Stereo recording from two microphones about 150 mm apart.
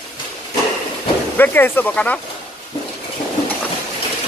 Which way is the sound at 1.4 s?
15° left (ahead or behind).